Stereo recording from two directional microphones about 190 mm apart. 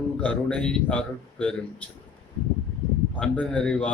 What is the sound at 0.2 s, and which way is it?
A man's voice, 5° left (ahead or behind).